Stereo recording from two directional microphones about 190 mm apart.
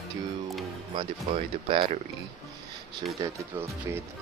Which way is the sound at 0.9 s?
30° right (ahead or behind).